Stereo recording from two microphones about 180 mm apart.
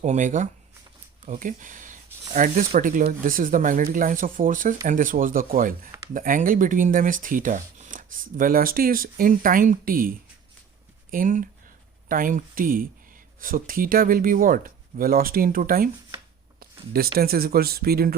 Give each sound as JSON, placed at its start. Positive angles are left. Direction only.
{"t": 0.0, "sound": "speech", "side_deg": -45}
{"t": 11.1, "sound": "speech", "side_deg": -50}